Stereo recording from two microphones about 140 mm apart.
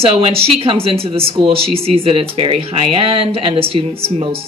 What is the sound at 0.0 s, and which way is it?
Speech, 45° right (ahead or behind).